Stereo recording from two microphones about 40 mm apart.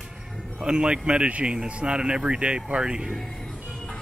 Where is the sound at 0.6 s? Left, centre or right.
Right.